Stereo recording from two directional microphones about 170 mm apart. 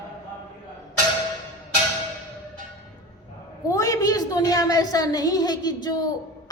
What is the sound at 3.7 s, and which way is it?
A woman's voice, 20° left (ahead or behind).